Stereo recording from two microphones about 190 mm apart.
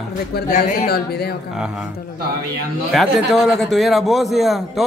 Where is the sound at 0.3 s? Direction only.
40° left (ahead or behind).